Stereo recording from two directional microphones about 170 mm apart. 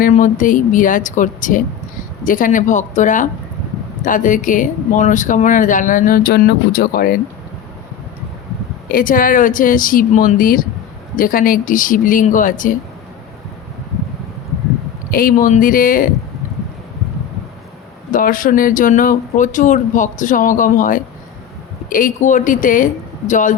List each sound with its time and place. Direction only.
0.1 s speech: 50° left (ahead or behind)
8.9 s speech: 55° left (ahead or behind)
15.1 s speech: 55° left (ahead or behind)
18.1 s speech: 55° left (ahead or behind)